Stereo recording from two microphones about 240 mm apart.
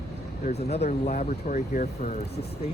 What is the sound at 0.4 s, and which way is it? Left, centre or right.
Speech, left.